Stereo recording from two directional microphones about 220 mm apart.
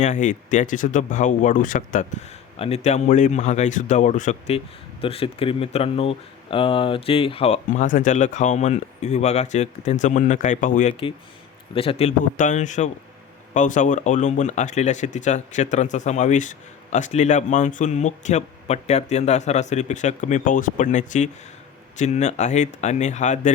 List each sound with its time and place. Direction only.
0.0 s speech: 35° left (ahead or behind)